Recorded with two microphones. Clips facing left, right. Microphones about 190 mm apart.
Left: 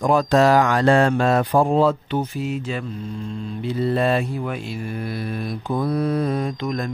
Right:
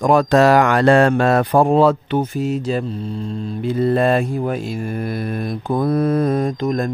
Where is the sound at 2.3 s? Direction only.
40° right (ahead or behind).